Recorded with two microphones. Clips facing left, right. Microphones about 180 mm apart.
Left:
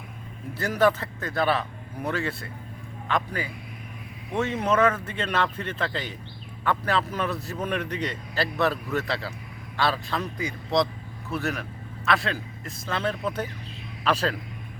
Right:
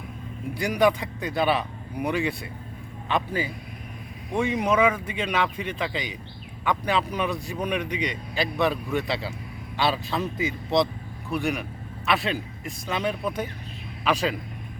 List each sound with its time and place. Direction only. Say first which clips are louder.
0.6 s a man's voice: right 1 dB; 15° right (ahead or behind)
4.4 s a man's voice: right 1 dB; 10° right (ahead or behind)
12.0 s a man's voice: right 1 dB; 20° right (ahead or behind)